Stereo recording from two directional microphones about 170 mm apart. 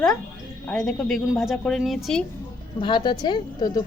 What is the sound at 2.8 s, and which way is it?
A man's voice, 25° left (ahead or behind).